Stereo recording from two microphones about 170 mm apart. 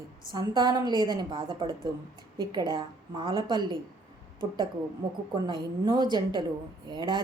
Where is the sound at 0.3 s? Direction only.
25° right (ahead or behind).